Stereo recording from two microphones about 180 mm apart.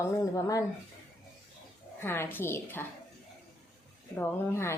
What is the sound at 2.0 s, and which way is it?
Speech, 10° left (ahead or behind).